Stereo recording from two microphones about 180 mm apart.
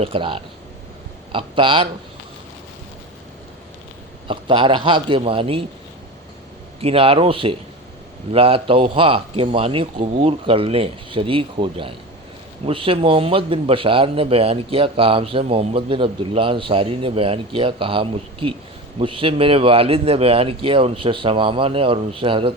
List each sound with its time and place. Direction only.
0.0 s a man's voice: 30° right (ahead or behind)
4.3 s speech: 30° right (ahead or behind)
6.8 s a man's voice: 30° right (ahead or behind)